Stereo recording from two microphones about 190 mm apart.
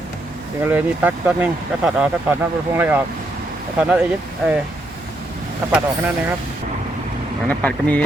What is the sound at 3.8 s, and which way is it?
Speech, 5° right (ahead or behind).